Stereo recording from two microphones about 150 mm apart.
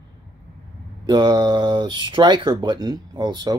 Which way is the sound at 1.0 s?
30° right (ahead or behind).